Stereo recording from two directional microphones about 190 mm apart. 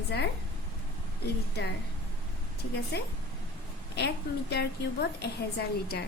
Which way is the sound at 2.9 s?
60° left (ahead or behind).